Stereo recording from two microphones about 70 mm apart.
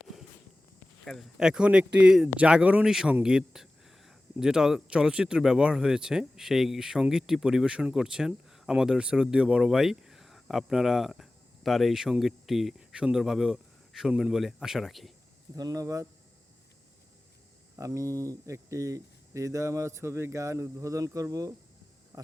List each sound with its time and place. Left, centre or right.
1.0 s speech: centre
1.4 s speech: centre
2.8 s speech: centre
15.5 s speech: right
17.7 s speech: right
22.1 s hum: right